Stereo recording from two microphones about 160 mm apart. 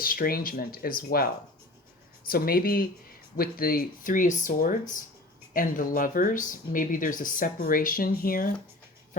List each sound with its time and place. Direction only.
0.0 s speech: 65° left (ahead or behind)
2.3 s speech: 65° left (ahead or behind)